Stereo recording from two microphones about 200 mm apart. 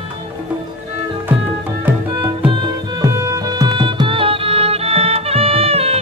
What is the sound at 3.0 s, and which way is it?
Music, 20° right (ahead or behind).